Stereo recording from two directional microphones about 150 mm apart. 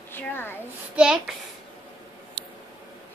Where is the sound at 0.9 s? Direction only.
5° right (ahead or behind).